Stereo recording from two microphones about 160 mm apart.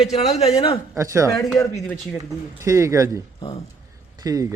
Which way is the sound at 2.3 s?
20° right (ahead or behind).